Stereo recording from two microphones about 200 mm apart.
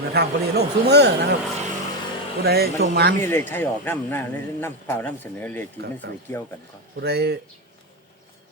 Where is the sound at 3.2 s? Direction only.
10° left (ahead or behind).